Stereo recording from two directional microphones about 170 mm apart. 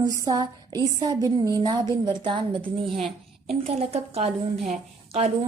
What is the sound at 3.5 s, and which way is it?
A woman's voice, 35° right (ahead or behind).